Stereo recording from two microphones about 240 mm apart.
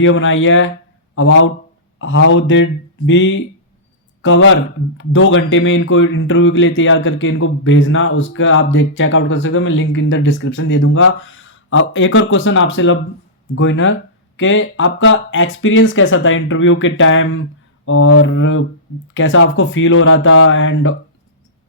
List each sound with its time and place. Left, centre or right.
0.0 s a man's voice: left